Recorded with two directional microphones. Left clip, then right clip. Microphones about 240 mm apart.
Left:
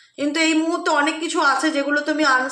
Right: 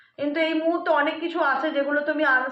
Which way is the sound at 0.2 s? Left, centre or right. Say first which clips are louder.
Left 4 dB; left.